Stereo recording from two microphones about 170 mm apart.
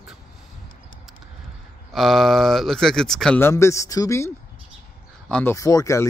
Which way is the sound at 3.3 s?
15° left (ahead or behind).